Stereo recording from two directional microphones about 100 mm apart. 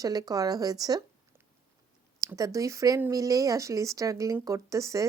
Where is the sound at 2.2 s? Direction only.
35° right (ahead or behind).